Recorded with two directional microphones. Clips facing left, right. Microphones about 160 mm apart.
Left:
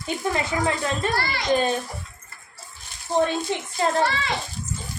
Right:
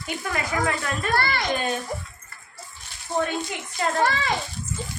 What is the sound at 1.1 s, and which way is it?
Speech, 55° right (ahead or behind).